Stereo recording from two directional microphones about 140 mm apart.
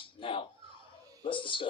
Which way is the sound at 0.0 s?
35° left (ahead or behind).